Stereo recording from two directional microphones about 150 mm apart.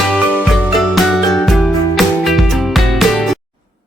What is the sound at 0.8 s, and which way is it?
Music, centre (ahead or behind).